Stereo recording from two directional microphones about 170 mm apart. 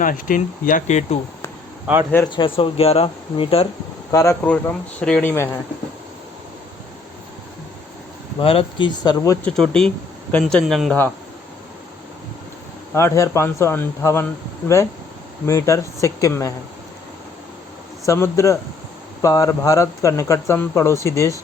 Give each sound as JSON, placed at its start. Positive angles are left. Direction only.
{"t": 0.0, "sound": "speech", "side_deg": 55}
{"t": 1.9, "sound": "speech", "side_deg": -5}
{"t": 2.3, "sound": "speech", "side_deg": 30}
{"t": 4.1, "sound": "speech", "side_deg": 15}
{"t": 8.4, "sound": "speech", "side_deg": 35}
{"t": 9.4, "sound": "speech", "side_deg": 5}
{"t": 12.9, "sound": "speech", "side_deg": 15}
{"t": 15.4, "sound": "speech", "side_deg": 15}
{"t": 18.0, "sound": "speech", "side_deg": 15}